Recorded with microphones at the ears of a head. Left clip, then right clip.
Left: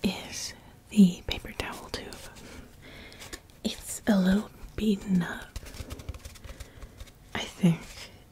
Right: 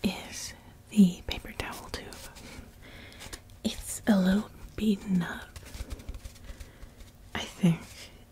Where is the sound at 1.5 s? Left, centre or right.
Centre.